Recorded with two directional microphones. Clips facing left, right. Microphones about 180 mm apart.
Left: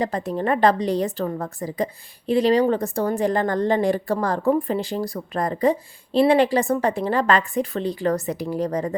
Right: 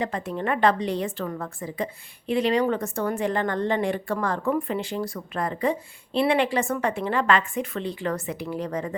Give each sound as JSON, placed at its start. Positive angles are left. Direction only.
{"t": 0.0, "sound": "a woman's voice", "side_deg": 35}